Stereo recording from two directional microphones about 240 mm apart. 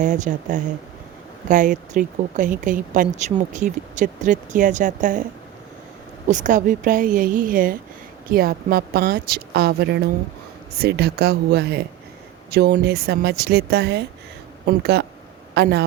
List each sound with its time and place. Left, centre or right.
0.0 s speech: right
6.2 s a man's voice: right